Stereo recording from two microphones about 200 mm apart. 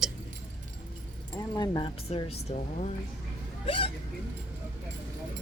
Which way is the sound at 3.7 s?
25° left (ahead or behind).